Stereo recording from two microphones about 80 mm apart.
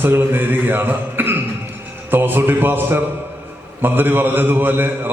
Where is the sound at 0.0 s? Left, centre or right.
Right.